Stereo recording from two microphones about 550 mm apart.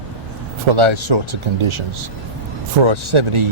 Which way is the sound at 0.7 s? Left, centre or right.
Right.